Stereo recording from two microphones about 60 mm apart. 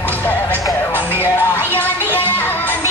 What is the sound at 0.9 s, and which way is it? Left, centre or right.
Music, right.